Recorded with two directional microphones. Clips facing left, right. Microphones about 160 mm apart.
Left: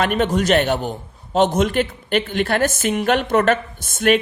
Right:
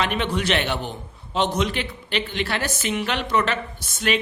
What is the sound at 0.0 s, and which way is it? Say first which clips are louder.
A man's voice: left 5 dB; 45° left (ahead or behind).